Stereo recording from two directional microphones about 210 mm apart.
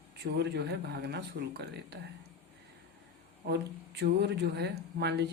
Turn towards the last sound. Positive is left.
turn(degrees=-50)  # may be behind; listen again after turning